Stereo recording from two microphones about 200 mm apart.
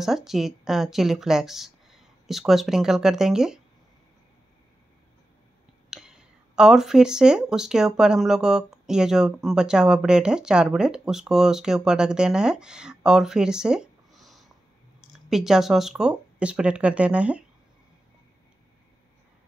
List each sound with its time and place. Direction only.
0.0 s speech: centre (ahead or behind)
5.9 s speech: 5° right (ahead or behind)